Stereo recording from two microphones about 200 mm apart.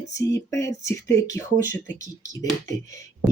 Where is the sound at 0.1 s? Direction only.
15° left (ahead or behind).